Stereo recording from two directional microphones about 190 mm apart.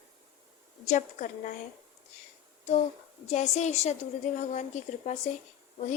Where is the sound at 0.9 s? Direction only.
40° left (ahead or behind).